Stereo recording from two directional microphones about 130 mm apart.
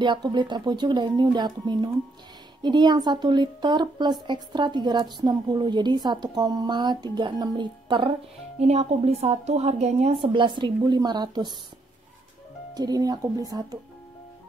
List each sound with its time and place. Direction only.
0.0 s a woman's voice: 35° right (ahead or behind)
8.5 s a woman's voice: 55° right (ahead or behind); by 11.5 s 35° right (ahead or behind)
12.7 s speech: 30° right (ahead or behind)